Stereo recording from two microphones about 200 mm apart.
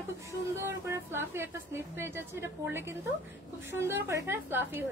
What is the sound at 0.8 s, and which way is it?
A woman's voice, 10° right (ahead or behind).